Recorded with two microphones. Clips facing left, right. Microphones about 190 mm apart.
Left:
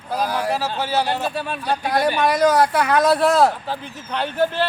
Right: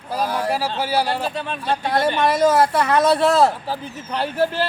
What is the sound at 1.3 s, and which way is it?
A man's voice, 10° left (ahead or behind).